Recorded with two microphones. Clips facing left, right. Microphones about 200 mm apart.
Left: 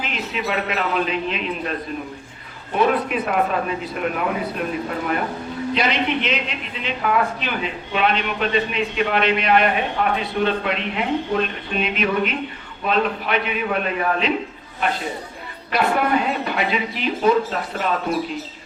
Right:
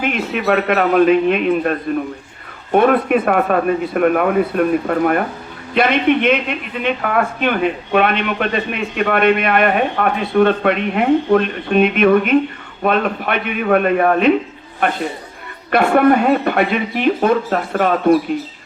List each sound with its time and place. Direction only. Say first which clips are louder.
0.0 s a man's voice: right 8 dB; 55° right (ahead or behind)
2.7 s a man's voice: right 7 dB; 55° right (ahead or behind)